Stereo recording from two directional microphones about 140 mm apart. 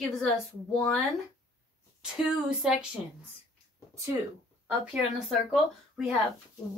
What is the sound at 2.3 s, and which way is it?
Speech, 5° right (ahead or behind).